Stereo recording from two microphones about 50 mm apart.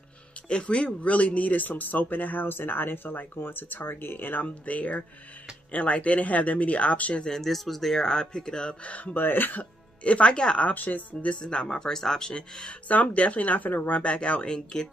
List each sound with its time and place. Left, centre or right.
0.5 s speech: centre; by 4.5 s left
4.6 s speech: left
7.2 s speech: centre; by 9.1 s left
9.1 s speech: left
10.0 s speech: left
10.7 s speech: left
11.4 s speech: centre
12.8 s speech: left